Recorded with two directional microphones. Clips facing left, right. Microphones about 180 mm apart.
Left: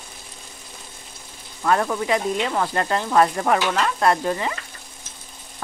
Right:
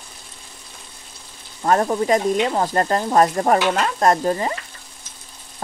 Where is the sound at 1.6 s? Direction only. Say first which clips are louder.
Right 3 dB; 35° right (ahead or behind).